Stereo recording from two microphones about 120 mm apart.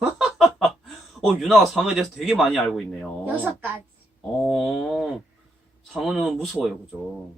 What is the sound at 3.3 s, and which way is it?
Speech, 15° right (ahead or behind).